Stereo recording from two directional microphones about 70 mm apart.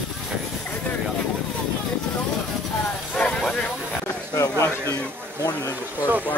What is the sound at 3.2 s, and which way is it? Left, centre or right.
Vehicle, centre.